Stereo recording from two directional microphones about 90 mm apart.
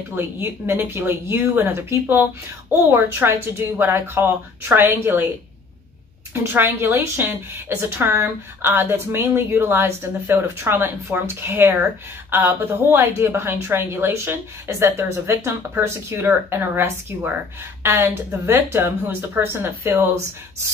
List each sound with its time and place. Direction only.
0.1 s a woman's voice: 25° right (ahead or behind)
6.3 s a woman's voice: 25° right (ahead or behind)